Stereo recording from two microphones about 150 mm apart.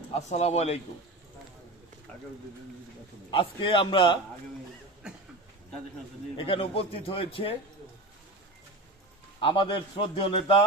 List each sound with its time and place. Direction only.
0.2 s a man's voice: 45° left (ahead or behind)
3.2 s a man's voice: 35° left (ahead or behind)
5.0 s a sound: 5° right (ahead or behind)
6.3 s a man's voice: 40° left (ahead or behind)
9.4 s a man's voice: 35° left (ahead or behind)